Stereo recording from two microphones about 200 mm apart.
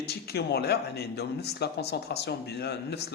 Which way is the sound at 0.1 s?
55° left (ahead or behind).